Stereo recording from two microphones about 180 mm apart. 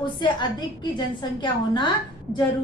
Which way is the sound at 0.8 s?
25° left (ahead or behind).